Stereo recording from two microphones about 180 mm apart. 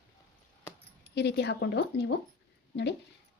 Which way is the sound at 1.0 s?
70° left (ahead or behind).